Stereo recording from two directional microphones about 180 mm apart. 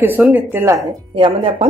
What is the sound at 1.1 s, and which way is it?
Speech, 30° right (ahead or behind).